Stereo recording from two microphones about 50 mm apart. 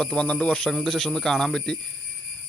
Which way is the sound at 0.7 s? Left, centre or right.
Centre.